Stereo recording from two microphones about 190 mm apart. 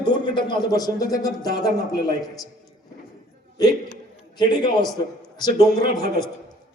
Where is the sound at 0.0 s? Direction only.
25° left (ahead or behind).